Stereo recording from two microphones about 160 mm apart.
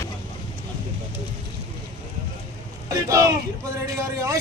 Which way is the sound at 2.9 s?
20° right (ahead or behind).